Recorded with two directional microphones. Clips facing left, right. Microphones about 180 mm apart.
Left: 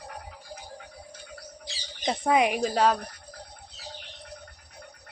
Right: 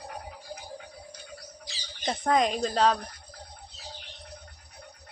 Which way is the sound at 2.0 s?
10° left (ahead or behind).